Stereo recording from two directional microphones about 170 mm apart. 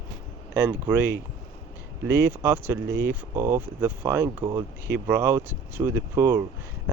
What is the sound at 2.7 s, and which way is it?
Speech, 15° right (ahead or behind).